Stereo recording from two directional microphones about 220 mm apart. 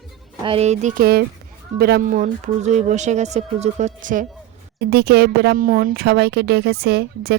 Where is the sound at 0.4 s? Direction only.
30° right (ahead or behind).